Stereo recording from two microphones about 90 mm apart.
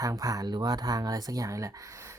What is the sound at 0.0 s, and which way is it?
Speech, 40° right (ahead or behind).